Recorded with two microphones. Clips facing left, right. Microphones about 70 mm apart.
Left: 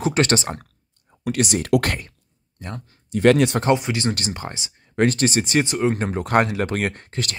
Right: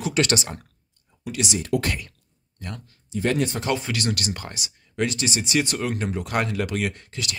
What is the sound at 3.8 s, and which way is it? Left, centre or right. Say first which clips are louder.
Speech: left 3 dB; left.